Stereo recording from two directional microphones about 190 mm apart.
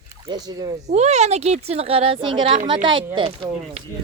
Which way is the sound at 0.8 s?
35° right (ahead or behind).